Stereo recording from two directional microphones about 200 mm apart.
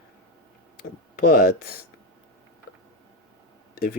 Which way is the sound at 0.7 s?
45° left (ahead or behind).